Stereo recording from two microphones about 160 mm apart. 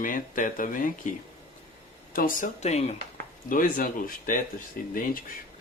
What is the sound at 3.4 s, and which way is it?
Speech, 60° left (ahead or behind).